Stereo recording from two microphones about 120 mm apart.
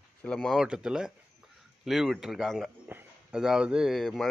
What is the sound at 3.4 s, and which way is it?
Speech, 5° right (ahead or behind).